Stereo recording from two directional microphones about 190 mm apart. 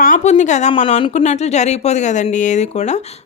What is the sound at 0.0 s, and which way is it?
Speech, 40° left (ahead or behind).